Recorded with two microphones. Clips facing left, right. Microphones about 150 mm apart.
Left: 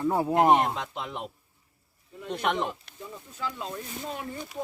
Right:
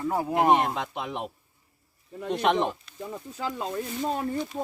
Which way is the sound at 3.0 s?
55° right (ahead or behind).